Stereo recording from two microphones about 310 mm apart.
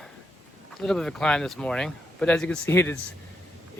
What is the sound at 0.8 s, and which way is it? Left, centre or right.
Speech, centre.